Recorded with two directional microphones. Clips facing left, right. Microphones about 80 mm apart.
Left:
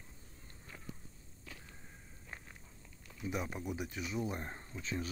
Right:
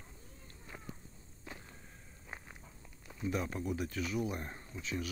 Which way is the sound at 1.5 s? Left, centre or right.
Right.